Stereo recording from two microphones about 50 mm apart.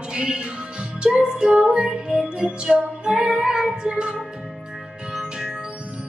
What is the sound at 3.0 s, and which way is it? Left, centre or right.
Female singing, centre.